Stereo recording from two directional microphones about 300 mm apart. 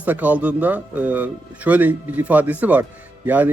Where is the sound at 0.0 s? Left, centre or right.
Centre.